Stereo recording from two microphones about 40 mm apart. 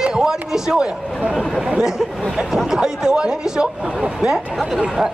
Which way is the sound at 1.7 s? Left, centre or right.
Centre.